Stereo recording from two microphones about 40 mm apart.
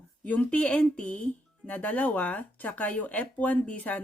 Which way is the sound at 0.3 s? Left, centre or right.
Left.